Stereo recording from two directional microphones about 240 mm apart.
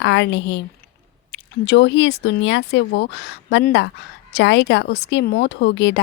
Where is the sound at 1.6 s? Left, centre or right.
Left.